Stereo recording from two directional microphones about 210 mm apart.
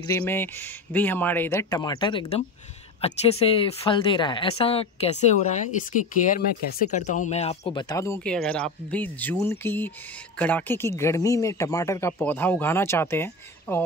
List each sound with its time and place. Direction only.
0.0 s speech: 10° left (ahead or behind); by 7.8 s 30° left (ahead or behind)
7.9 s speech: 15° left (ahead or behind)